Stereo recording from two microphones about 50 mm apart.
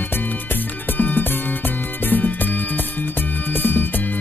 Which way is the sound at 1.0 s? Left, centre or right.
Left.